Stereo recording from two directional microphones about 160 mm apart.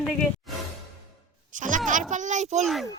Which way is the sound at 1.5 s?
55° right (ahead or behind).